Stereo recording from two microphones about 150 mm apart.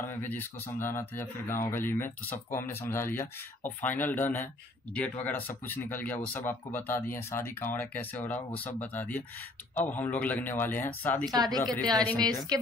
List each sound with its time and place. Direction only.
0.0 s speech: 15° left (ahead or behind)
11.3 s speech: 25° right (ahead or behind)
11.6 s a woman's voice: 5° left (ahead or behind)